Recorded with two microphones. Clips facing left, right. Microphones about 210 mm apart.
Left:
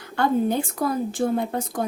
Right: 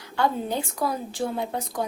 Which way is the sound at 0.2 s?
50° left (ahead or behind).